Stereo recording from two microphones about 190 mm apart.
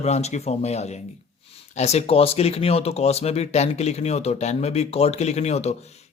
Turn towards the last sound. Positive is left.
turn(degrees=35)  # may be behind; listen again after turning